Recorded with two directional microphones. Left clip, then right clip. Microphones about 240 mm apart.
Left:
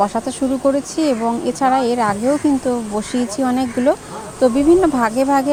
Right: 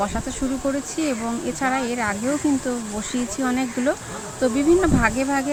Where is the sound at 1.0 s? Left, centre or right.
Centre.